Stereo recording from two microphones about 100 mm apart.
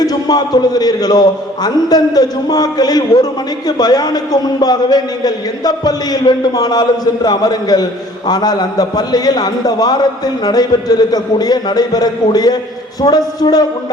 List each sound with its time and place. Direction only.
0.0 s a man's voice: 40° left (ahead or behind)